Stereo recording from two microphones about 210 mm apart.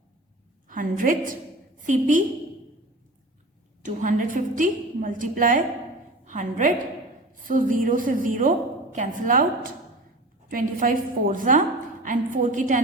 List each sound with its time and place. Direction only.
0.7 s a woman's voice: 40° right (ahead or behind)
3.8 s a woman's voice: 40° right (ahead or behind)
10.5 s a woman's voice: 40° right (ahead or behind)